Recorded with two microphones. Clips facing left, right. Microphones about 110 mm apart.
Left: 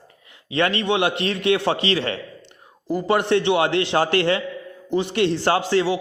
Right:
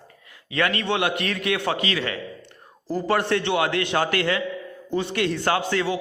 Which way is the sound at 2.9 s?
20° left (ahead or behind).